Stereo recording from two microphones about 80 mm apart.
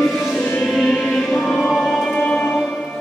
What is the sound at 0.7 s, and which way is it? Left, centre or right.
Music, centre.